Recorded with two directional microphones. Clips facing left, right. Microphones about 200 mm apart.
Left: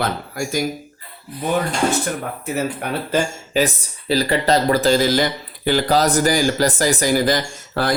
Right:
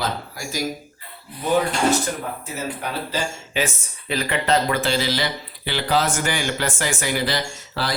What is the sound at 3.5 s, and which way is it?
Speech, 35° left (ahead or behind).